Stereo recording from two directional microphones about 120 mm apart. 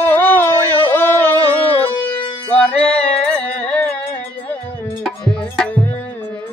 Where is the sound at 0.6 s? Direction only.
15° left (ahead or behind).